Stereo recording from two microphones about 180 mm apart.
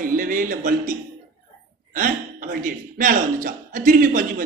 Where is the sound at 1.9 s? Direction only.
50° right (ahead or behind).